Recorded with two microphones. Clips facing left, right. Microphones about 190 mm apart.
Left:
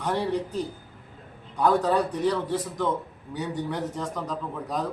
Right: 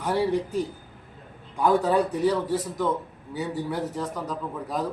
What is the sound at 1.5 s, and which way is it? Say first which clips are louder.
A man's voice: right 1 dB; 10° right (ahead or behind).